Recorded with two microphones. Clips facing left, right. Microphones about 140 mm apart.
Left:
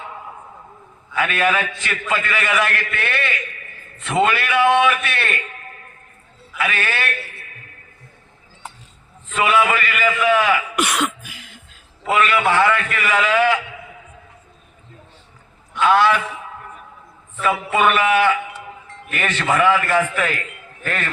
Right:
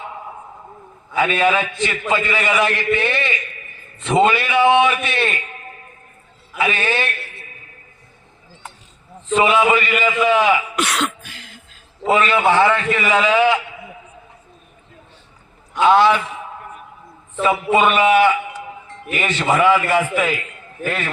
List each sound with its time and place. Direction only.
1.1 s a man's voice: 20° right (ahead or behind)
6.6 s a man's voice: 20° right (ahead or behind)
9.3 s a man's voice: 20° right (ahead or behind)
10.8 s music: 10° left (ahead or behind)
12.0 s a man's voice: 25° right (ahead or behind)
15.8 s a man's voice: 20° right (ahead or behind)